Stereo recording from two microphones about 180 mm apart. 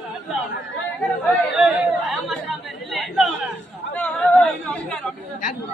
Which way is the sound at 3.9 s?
10° left (ahead or behind).